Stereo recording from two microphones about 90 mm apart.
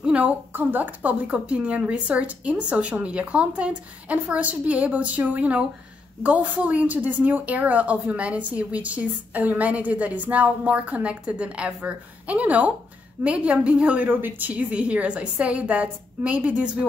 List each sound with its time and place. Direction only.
0.0 s a woman's voice: 15° right (ahead or behind)